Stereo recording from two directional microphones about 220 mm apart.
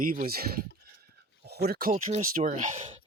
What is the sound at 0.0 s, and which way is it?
Speech, 40° right (ahead or behind).